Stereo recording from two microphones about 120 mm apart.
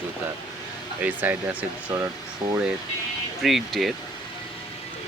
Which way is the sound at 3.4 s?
Centre (ahead or behind).